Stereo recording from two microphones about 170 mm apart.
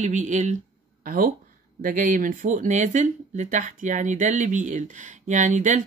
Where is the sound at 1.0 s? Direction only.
55° right (ahead or behind).